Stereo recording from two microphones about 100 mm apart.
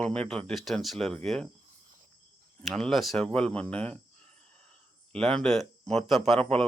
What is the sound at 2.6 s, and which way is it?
Speech, 5° left (ahead or behind).